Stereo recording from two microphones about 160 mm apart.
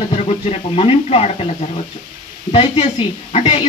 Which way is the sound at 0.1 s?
40° left (ahead or behind).